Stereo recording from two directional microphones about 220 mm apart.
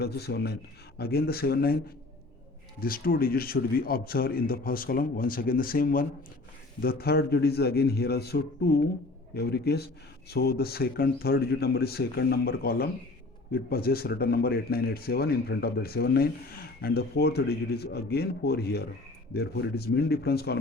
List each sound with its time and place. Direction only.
0.0 s speech: 45° left (ahead or behind)
2.8 s speech: 40° left (ahead or behind)